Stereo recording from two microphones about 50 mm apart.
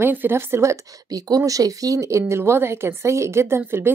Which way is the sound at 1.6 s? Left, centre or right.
Right.